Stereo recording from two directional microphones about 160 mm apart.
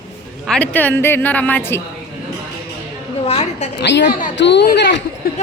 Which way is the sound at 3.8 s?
90° left.